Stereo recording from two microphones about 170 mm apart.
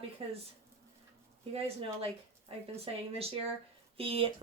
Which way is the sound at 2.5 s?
35° right (ahead or behind).